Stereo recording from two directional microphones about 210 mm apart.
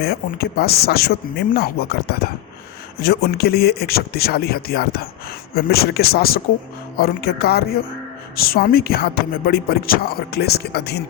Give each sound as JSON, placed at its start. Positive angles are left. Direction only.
{"t": 0.0, "sound": "speech", "side_deg": 45}